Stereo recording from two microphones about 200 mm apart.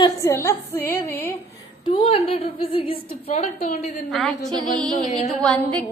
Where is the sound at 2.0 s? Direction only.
30° left (ahead or behind).